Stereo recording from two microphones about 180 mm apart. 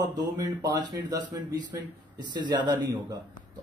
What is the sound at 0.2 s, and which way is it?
A man's voice, 20° right (ahead or behind).